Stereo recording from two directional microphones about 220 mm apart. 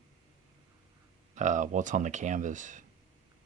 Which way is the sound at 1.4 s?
35° right (ahead or behind).